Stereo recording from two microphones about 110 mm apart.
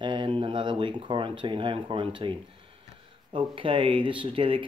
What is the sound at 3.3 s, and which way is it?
Speech, 50° right (ahead or behind).